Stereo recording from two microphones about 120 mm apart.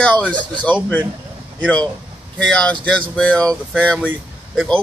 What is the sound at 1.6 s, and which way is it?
Speech, 10° left (ahead or behind).